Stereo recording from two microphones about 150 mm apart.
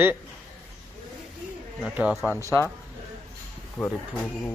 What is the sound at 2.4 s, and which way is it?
Speech, 20° left (ahead or behind).